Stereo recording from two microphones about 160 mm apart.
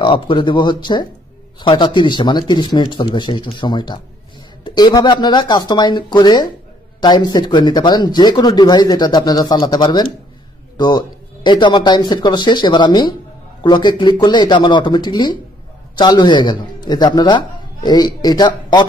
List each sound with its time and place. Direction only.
0.0 s speech: 30° left (ahead or behind)